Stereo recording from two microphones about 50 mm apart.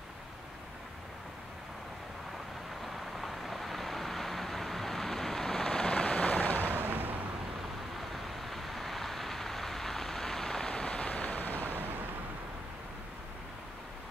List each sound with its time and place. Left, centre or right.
2.8 s vehicle: centre; by 6.6 s left
6.6 s artillery fire: right
8.1 s vehicle: centre; by 11.6 s left
11.6 s a sound: right